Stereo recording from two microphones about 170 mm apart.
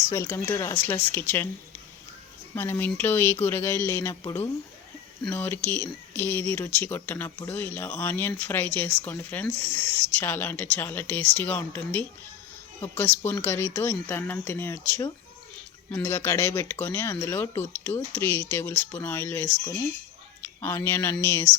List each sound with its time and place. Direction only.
0.1 s speech: 15° left (ahead or behind)
2.6 s speech: 15° left (ahead or behind)
5.2 s speech: 10° left (ahead or behind)